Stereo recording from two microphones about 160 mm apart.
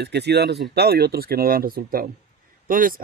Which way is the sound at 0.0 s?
90° right.